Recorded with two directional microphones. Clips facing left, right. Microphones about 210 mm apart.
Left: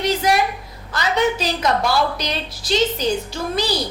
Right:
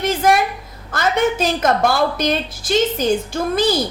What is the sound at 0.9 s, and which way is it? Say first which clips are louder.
A woman's voice: right 2 dB; 50° right (ahead or behind).